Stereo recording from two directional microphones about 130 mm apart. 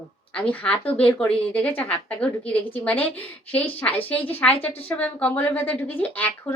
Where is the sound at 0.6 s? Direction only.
10° left (ahead or behind).